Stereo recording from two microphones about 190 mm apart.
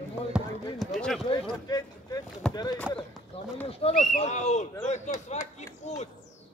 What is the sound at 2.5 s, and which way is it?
Clip-clop, 20° left (ahead or behind).